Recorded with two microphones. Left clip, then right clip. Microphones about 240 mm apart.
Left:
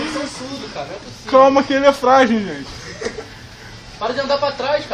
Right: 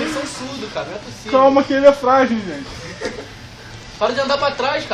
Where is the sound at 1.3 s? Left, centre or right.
Left.